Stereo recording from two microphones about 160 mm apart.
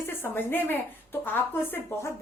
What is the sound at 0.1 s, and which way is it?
A woman's voice, 15° left (ahead or behind).